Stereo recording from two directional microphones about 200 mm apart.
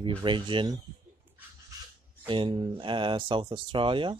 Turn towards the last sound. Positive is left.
turn(degrees=-25)  # may be behind; listen again after turning